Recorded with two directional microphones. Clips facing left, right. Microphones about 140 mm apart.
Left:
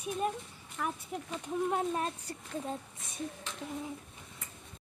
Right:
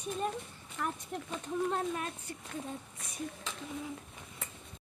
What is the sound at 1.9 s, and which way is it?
Speech, 35° left (ahead or behind).